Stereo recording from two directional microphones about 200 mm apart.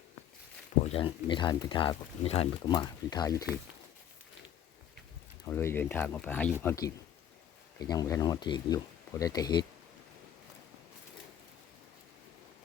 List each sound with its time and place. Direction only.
0.9 s speech: 25° left (ahead or behind)
5.5 s speech: 10° left (ahead or behind)